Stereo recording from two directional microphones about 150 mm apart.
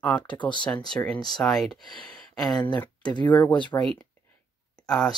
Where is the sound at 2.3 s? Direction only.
5° left (ahead or behind).